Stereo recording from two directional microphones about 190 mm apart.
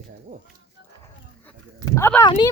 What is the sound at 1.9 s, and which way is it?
Speech, 15° left (ahead or behind).